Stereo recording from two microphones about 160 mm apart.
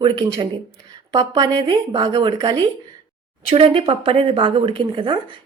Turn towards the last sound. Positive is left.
turn(degrees=-30)  # may be behind; listen again after turning